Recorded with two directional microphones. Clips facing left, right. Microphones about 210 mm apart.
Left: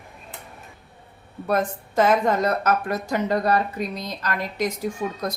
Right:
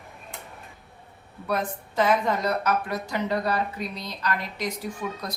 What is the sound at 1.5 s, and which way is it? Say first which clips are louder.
A woman's voice: left 5 dB; 45° left (ahead or behind).